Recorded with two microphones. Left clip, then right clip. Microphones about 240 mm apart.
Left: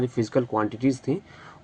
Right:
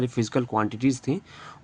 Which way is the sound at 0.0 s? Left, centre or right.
Right.